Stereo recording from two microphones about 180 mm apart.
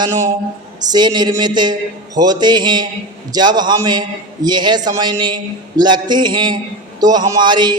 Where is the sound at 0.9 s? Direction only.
25° right (ahead or behind).